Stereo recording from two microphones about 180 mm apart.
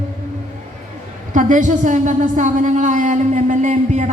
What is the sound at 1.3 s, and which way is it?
A woman's voice, 45° right (ahead or behind).